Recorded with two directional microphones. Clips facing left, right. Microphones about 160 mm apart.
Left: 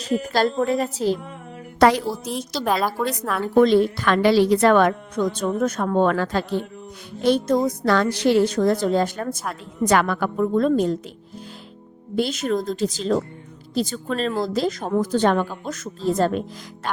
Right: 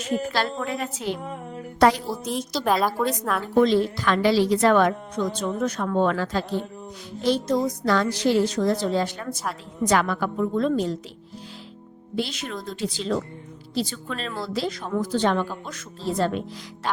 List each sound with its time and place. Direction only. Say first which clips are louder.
0.0 s a woman's voice: left 4 dB; 40° left (ahead or behind)
1.8 s a woman's voice: left 2 dB; 90° left
2.2 s a woman's voice: even; centre (ahead or behind)
3.5 s a woman's voice: left 4 dB; 55° left (ahead or behind)
9.8 s a woman's voice: left 3 dB; 60° left (ahead or behind)
12.1 s a woman's voice: left 7 dB; 45° left (ahead or behind)